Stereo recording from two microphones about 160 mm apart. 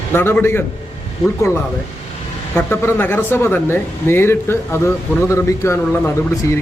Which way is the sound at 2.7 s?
15° left (ahead or behind).